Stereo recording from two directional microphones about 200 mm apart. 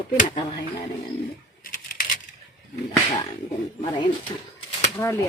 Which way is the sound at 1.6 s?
45° left (ahead or behind).